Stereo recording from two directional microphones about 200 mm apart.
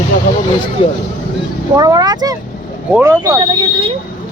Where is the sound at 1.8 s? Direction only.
20° right (ahead or behind).